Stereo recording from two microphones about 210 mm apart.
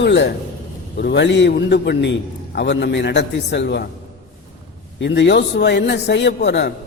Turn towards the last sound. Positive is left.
turn(degrees=55)  # may be behind; listen again after turning